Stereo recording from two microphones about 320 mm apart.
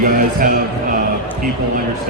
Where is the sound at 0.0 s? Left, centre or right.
Right.